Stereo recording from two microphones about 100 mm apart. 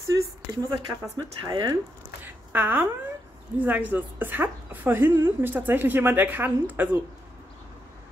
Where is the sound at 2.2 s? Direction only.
20° right (ahead or behind).